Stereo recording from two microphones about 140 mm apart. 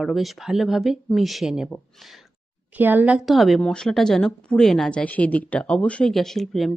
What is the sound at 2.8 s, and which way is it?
A woman's voice, 10° right (ahead or behind).